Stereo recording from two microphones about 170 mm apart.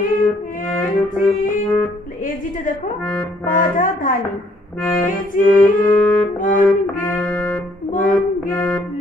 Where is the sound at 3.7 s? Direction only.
50° left (ahead or behind).